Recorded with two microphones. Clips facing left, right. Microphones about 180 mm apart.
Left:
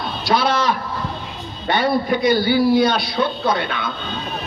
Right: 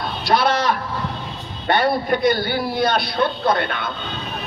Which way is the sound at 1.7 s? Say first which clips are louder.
Even; 60° right (ahead or behind).